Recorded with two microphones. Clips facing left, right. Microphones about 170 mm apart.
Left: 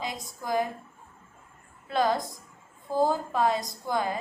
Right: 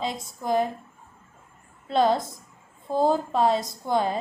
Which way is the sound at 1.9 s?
25° right (ahead or behind).